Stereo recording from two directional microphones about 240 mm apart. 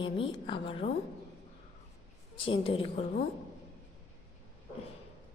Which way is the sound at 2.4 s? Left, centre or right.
Left.